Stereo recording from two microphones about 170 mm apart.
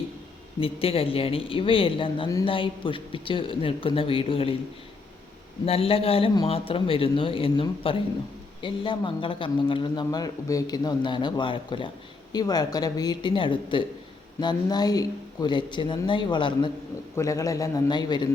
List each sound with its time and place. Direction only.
0.6 s speech: 35° left (ahead or behind)
5.6 s a man's voice: 35° left (ahead or behind)